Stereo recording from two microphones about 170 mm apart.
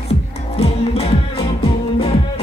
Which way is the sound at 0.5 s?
35° left (ahead or behind).